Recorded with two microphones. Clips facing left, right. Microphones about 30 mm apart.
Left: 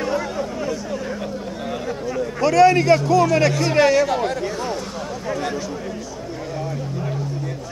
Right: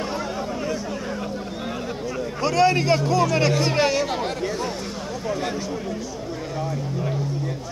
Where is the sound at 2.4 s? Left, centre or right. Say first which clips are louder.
Left 5 dB; centre.